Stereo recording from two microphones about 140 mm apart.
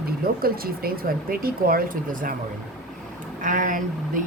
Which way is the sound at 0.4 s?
90° right.